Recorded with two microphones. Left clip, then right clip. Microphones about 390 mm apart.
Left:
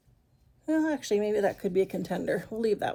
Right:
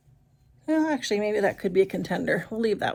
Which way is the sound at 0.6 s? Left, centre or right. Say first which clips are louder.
Right 3 dB; centre.